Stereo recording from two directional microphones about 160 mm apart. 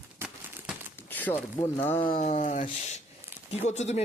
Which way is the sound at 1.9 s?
30° left (ahead or behind).